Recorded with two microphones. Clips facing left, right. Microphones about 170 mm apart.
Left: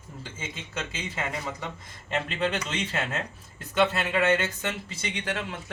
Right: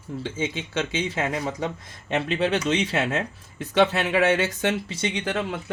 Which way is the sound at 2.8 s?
80° right.